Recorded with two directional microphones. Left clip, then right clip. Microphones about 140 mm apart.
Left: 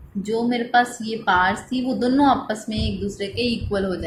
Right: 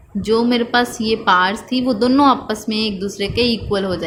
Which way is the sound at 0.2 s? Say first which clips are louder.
Right 7 dB; 90° right.